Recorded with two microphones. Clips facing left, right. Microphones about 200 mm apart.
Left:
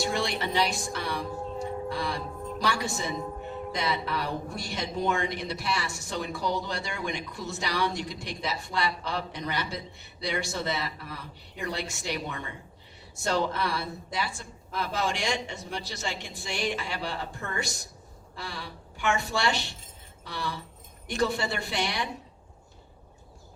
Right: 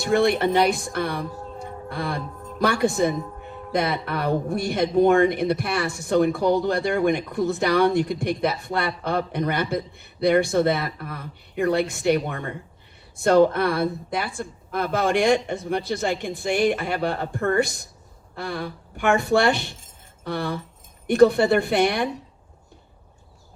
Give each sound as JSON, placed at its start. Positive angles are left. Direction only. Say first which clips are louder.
{"t": 0.0, "sound": "speech", "louder": "right 10 dB", "side_deg": -55}